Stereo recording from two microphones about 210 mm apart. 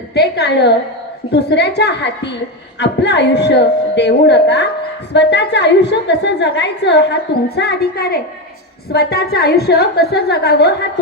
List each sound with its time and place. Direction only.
0.1 s a woman's voice: 50° left (ahead or behind)